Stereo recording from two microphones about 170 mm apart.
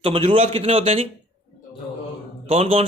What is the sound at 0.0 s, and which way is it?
A man's voice, 30° right (ahead or behind).